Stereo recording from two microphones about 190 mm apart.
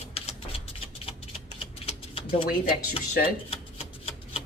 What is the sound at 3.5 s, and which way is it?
Shuffling cards, 30° left (ahead or behind).